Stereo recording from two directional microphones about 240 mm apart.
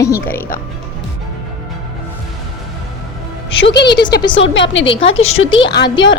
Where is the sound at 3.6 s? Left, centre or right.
Left.